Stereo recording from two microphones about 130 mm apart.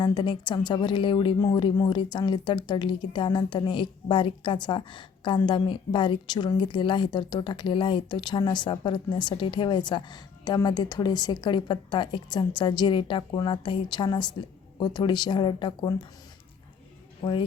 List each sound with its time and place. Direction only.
0.0 s speech: 35° left (ahead or behind)
17.2 s speech: 40° left (ahead or behind)